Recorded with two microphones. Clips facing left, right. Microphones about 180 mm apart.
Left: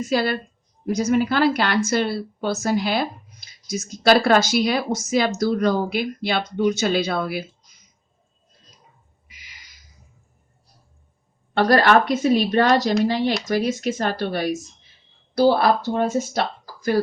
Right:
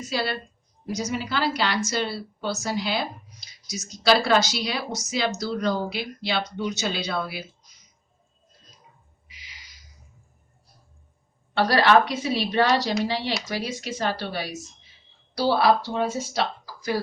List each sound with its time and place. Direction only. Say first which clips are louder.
0.0 s speech: left 6 dB; 55° left (ahead or behind)
9.2 s a sound: even; 50° left (ahead or behind)
11.5 s speech: left 3 dB; 50° left (ahead or behind)